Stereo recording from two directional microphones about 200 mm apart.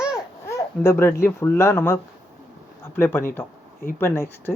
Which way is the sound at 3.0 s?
10° left (ahead or behind).